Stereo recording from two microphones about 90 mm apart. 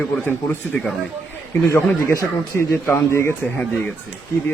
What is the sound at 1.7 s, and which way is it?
Speech, 30° left (ahead or behind).